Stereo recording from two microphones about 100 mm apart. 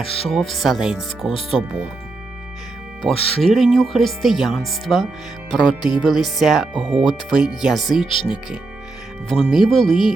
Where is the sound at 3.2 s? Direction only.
80° left.